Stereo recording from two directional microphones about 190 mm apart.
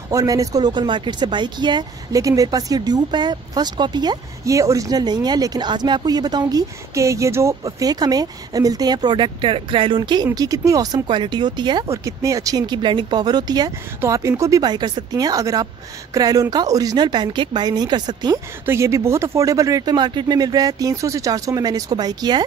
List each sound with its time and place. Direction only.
0.1 s speech: 20° right (ahead or behind)